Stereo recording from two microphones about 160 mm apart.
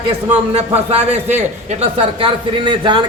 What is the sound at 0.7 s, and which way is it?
A man's voice, 40° right (ahead or behind).